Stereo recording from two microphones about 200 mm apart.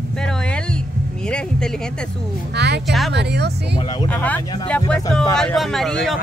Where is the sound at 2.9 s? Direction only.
Centre (ahead or behind).